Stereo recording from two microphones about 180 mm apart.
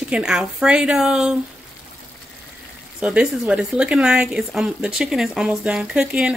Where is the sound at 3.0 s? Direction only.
5° right (ahead or behind).